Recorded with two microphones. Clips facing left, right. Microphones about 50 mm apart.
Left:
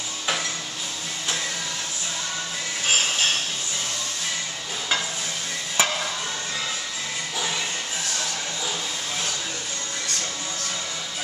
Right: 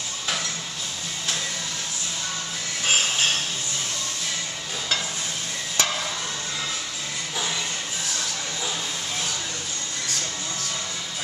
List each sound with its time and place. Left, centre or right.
5.8 s stir: centre